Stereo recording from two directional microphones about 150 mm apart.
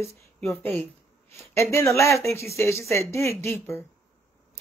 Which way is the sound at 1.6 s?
20° left (ahead or behind).